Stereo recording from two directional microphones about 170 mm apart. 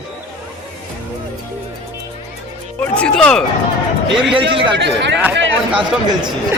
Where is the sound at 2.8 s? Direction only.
5° left (ahead or behind).